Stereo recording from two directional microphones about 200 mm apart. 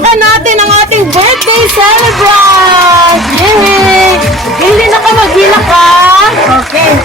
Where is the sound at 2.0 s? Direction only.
Centre (ahead or behind).